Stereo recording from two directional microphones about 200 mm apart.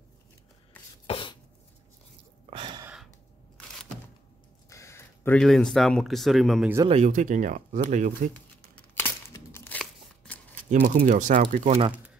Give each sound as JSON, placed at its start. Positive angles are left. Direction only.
{"t": 1.0, "sound": "a sound", "side_deg": 25}
{"t": 2.5, "sound": "gasp", "side_deg": -25}
{"t": 2.8, "sound": "gasp", "side_deg": -5}
{"t": 4.6, "sound": "speech", "side_deg": 15}
{"t": 6.9, "sound": "speech", "side_deg": -35}
{"t": 8.7, "sound": "tearing", "side_deg": 10}
{"t": 10.7, "sound": "speech", "side_deg": -40}